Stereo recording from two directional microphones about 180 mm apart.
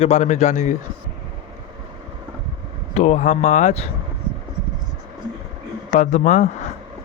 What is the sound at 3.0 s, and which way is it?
Speech, 40° left (ahead or behind).